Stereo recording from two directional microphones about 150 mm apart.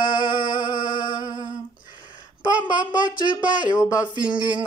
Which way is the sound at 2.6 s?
30° left (ahead or behind).